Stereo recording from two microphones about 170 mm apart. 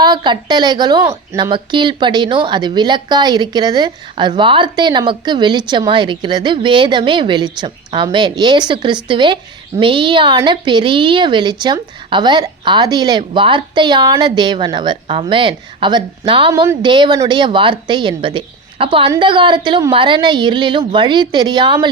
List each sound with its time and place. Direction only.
0.0 s a woman's voice: 25° right (ahead or behind)